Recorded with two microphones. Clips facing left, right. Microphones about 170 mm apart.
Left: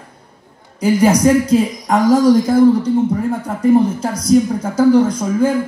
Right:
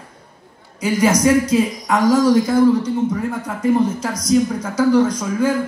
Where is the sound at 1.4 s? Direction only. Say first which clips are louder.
Left 3 dB; 35° left (ahead or behind).